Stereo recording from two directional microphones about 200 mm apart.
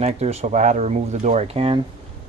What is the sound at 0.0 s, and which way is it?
Speech, 30° right (ahead or behind).